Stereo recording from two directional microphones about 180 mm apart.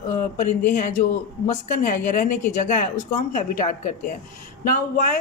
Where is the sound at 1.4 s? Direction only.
45° left (ahead or behind).